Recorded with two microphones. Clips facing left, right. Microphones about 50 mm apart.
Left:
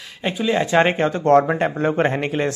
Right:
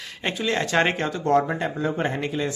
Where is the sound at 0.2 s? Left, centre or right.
Centre.